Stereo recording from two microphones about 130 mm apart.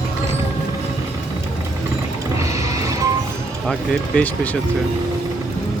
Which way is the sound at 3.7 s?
10° left (ahead or behind).